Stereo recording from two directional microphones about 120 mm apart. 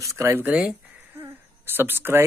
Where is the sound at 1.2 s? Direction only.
20° right (ahead or behind).